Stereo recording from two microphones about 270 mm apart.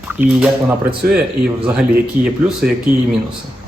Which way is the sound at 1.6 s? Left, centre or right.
Centre.